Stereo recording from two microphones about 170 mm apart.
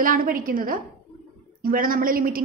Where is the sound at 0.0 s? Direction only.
55° right (ahead or behind).